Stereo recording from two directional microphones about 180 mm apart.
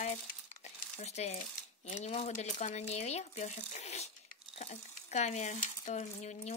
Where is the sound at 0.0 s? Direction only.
45° left (ahead or behind).